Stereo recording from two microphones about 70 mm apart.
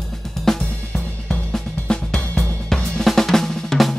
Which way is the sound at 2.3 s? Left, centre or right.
Left.